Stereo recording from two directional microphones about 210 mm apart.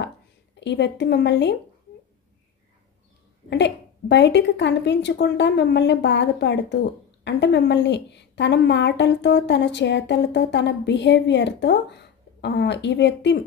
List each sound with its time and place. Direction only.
0.6 s a woman's voice: 55° left (ahead or behind)
3.4 s a woman's voice: 55° left (ahead or behind)